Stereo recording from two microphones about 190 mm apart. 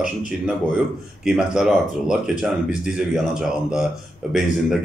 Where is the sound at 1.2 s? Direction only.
5° right (ahead or behind).